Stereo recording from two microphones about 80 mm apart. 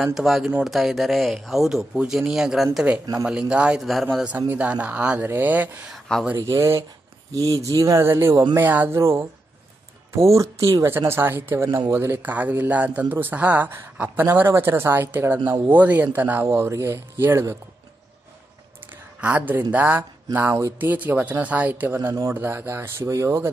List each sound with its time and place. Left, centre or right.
0.0 s speech: centre
3.8 s speech: centre
4.4 s speech: right
6.3 s speech: right
8.5 s speech: right
8.9 s speech: right
19.2 s speech: centre; by 23.5 s right